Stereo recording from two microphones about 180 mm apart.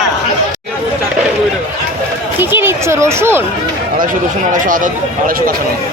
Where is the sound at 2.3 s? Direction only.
10° right (ahead or behind).